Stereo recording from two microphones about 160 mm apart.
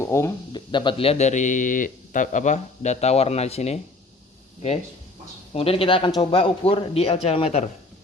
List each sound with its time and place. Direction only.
0.0 s a sound: 15° left (ahead or behind)
0.5 s speech: 30° left (ahead or behind)
5.5 s speech: 35° left (ahead or behind)